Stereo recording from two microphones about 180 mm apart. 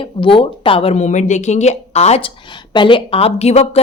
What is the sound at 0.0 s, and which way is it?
Speech, 30° left (ahead or behind).